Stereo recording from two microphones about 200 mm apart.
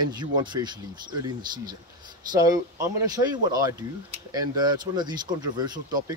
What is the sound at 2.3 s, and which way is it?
Speech, 15° right (ahead or behind).